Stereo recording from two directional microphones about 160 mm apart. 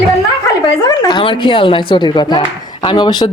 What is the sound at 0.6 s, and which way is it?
Speech, 25° left (ahead or behind).